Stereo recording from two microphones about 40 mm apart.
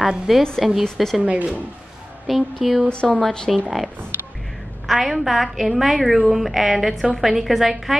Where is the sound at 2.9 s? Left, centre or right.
Left.